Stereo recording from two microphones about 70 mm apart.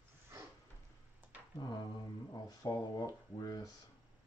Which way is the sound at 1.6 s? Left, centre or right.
Left.